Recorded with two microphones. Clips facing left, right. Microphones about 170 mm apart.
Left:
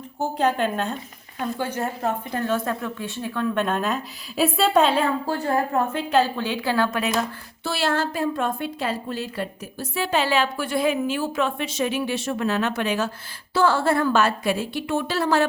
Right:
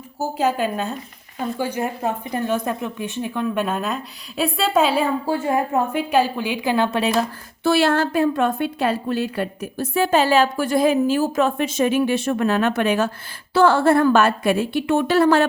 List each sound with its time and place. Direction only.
0.2 s a woman's voice: 5° right (ahead or behind); by 7.1 s 25° right (ahead or behind)
7.6 s a woman's voice: 60° right (ahead or behind)